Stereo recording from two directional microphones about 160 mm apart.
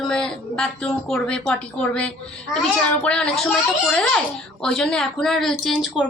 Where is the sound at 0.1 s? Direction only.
5° left (ahead or behind).